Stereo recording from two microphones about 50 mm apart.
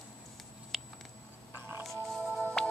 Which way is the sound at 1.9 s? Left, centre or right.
Centre.